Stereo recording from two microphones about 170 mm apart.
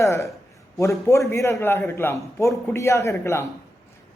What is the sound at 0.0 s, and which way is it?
A man's voice, 15° left (ahead or behind).